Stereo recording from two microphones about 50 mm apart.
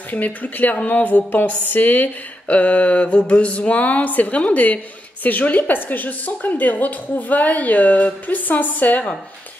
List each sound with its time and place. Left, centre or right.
0.1 s a woman's voice: left